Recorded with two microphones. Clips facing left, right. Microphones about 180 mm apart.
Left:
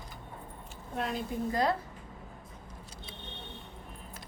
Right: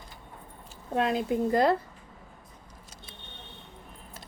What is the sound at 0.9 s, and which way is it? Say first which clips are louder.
Speech: right 8 dB; 90° right.